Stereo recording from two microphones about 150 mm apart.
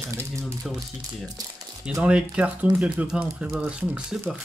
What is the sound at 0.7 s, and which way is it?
Speech, centre (ahead or behind).